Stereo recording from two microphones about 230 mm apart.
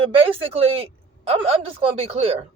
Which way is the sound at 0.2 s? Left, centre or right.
Right.